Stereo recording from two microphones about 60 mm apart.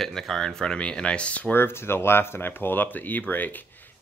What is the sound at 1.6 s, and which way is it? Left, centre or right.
Speech, left.